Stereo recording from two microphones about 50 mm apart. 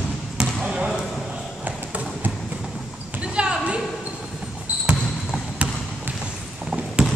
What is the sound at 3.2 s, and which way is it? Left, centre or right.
Basketball bounce, right.